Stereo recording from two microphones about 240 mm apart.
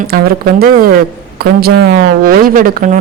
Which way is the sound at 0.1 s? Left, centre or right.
Right.